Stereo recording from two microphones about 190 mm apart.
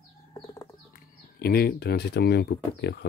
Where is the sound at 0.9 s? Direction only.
50° left (ahead or behind).